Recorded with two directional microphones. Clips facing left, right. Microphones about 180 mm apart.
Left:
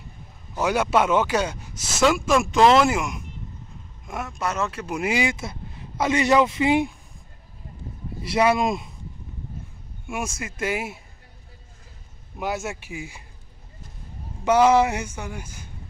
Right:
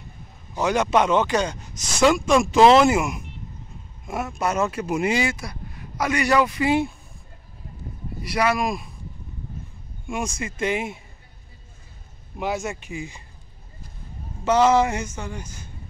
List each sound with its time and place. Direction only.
0.6 s speech: 10° left (ahead or behind); by 5.0 s 10° right (ahead or behind)
5.0 s speech: 15° left (ahead or behind)
8.2 s speech: 25° left (ahead or behind)
10.0 s speech: 5° left (ahead or behind)
12.4 s speech: centre (ahead or behind)
14.4 s speech: 10° left (ahead or behind)